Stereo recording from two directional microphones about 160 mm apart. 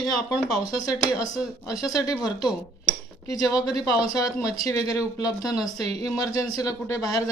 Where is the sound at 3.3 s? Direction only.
25° left (ahead or behind).